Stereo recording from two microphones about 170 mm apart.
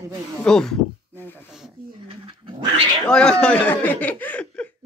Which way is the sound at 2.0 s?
30° right (ahead or behind).